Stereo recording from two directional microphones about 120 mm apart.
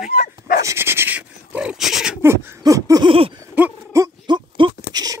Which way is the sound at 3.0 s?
50° right (ahead or behind).